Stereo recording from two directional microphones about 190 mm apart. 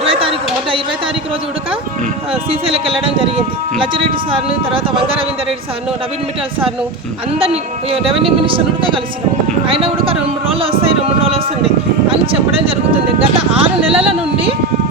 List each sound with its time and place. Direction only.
0.0 s a sound: 30° right (ahead or behind)
2.3 s speech: 30° right (ahead or behind)
7.3 s speech: 30° right (ahead or behind)